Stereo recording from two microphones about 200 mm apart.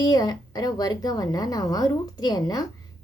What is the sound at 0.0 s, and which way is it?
A woman's voice, 20° left (ahead or behind).